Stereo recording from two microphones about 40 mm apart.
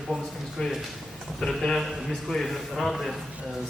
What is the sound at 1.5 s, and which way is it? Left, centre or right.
A man's voice, centre.